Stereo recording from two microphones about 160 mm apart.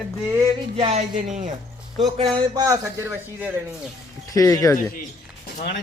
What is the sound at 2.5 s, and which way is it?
A man's voice, 25° right (ahead or behind).